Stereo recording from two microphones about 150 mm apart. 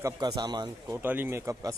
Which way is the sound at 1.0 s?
15° right (ahead or behind).